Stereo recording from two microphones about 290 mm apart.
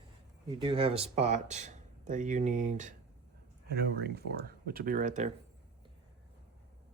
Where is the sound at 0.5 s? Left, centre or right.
Centre.